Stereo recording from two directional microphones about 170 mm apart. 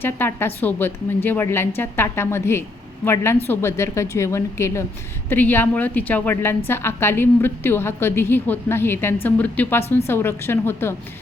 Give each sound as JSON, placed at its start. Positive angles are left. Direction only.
{"t": 0.0, "sound": "a woman's voice", "side_deg": 15}